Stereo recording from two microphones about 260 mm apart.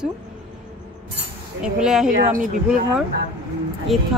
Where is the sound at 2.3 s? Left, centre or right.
Right.